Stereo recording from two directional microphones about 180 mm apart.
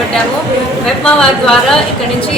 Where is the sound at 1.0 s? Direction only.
5° left (ahead or behind).